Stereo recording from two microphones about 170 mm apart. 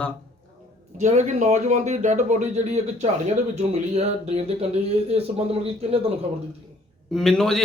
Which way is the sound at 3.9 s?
40° right (ahead or behind).